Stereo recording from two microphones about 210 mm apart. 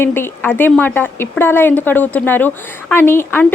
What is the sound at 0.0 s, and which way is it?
Speech, 10° left (ahead or behind).